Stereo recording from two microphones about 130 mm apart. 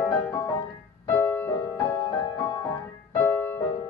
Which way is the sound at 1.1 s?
20° left (ahead or behind).